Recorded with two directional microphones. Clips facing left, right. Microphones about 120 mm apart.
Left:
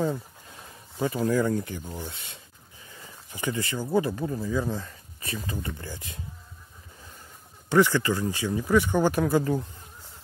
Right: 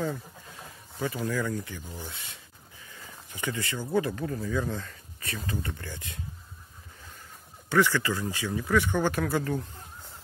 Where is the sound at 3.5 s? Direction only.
20° left (ahead or behind).